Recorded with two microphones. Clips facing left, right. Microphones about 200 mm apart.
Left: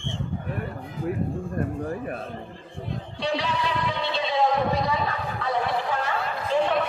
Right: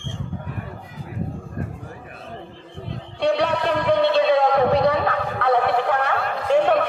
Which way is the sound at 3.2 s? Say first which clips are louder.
Right 7 dB; 60° right (ahead or behind).